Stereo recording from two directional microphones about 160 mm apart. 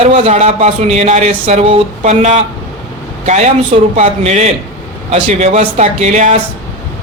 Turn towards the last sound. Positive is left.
turn(degrees=-45)  # may be behind; listen again after turning